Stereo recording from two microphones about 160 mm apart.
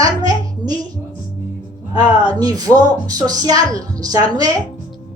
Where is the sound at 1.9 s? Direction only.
25° right (ahead or behind).